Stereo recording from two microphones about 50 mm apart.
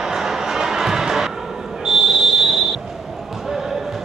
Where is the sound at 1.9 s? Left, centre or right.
Centre.